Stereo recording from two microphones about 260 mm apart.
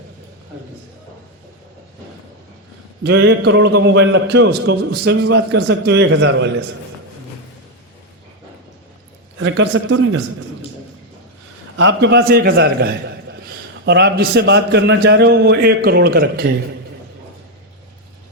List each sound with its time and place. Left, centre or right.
3.0 s a man's voice: right
9.4 s a man's voice: right
11.8 s a man's voice: right